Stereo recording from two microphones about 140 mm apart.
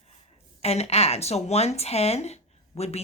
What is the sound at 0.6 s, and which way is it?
Speech, 50° left (ahead or behind).